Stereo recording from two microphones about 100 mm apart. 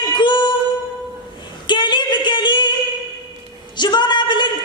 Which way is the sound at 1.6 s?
50° left (ahead or behind).